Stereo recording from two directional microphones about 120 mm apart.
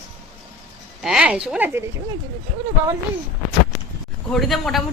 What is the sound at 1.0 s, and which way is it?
Speech, 5° right (ahead or behind).